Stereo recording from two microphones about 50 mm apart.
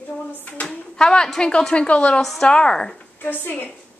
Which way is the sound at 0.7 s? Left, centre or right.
Centre.